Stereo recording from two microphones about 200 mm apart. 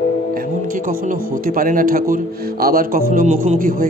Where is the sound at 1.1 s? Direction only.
45° right (ahead or behind).